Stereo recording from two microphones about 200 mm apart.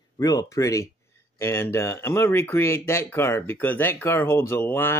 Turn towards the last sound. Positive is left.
turn(degrees=10)  # may be behind; listen again after turning